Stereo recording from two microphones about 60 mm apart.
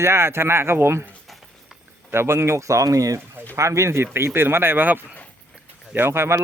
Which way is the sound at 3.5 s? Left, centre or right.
Right.